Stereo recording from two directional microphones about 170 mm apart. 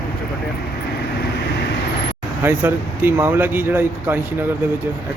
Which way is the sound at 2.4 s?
10° right (ahead or behind).